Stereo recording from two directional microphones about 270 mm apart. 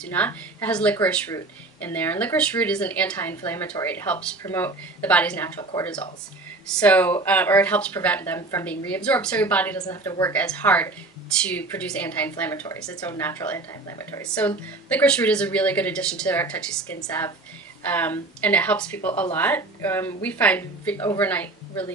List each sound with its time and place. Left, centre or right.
0.1 s speech: centre
5.6 s speech: centre
6.8 s a woman's voice: centre